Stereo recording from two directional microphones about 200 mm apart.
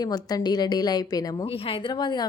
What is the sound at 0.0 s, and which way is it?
A woman's voice, 20° left (ahead or behind).